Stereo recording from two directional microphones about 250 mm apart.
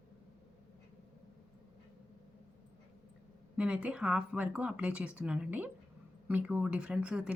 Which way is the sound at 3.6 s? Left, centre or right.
Centre.